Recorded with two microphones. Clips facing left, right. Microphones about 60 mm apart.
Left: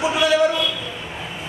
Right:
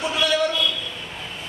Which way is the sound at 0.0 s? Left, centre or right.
Centre.